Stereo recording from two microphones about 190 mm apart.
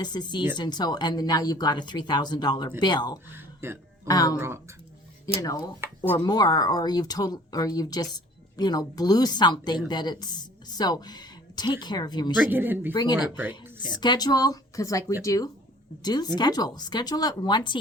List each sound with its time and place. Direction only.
0.0 s speech: 20° left (ahead or behind)
3.3 s a sound: 15° right (ahead or behind)
4.0 s speech: 20° left (ahead or behind)
4.4 s speech: 15° right (ahead or behind)
5.4 s speech: 20° left (ahead or behind)
12.4 s speech: 10° right (ahead or behind)
12.9 s speech: 20° left (ahead or behind)
13.4 s speech: 10° right (ahead or behind)
13.8 s speech: 25° left (ahead or behind)